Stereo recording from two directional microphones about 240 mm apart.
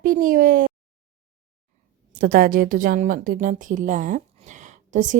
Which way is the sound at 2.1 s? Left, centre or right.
Right.